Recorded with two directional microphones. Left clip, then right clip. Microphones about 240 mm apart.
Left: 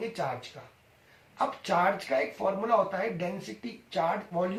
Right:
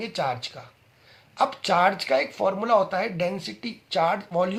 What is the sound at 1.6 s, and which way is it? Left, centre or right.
Speech, right.